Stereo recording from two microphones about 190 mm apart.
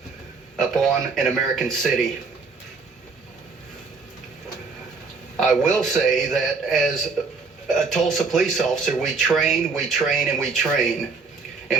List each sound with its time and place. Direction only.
0.5 s speech: centre (ahead or behind)
5.4 s speech: centre (ahead or behind)